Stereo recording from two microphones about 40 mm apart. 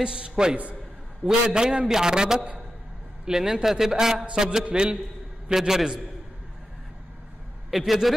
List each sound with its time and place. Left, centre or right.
0.0 s a man's voice: right
7.7 s a man's voice: centre